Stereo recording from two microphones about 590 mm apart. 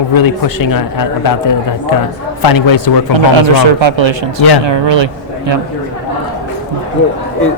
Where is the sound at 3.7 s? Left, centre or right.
Right.